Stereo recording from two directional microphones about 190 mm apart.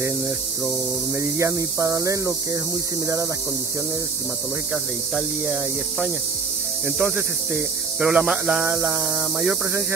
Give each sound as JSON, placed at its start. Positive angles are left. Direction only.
{"t": 1.2, "sound": "hum", "side_deg": -15}
{"t": 5.1, "sound": "speech", "side_deg": 0}
{"t": 9.4, "sound": "hum", "side_deg": -10}